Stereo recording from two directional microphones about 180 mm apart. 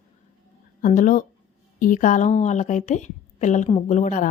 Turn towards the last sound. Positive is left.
turn(degrees=45)  # may be behind; listen again after turning